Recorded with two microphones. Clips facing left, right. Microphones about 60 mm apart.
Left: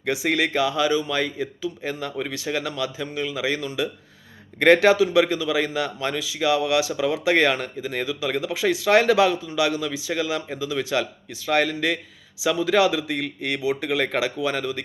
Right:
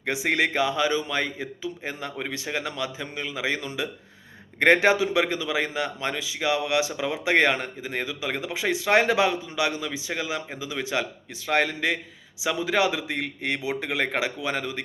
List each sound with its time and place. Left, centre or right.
0.0 s a man's voice: right